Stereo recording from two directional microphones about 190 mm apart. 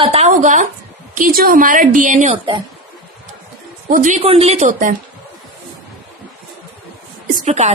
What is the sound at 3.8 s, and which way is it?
A woman's voice, 45° right (ahead or behind).